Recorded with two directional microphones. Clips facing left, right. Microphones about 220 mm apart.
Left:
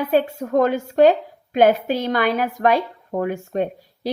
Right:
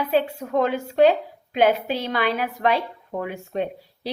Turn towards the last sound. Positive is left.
turn(degrees=45)  # may be behind; listen again after turning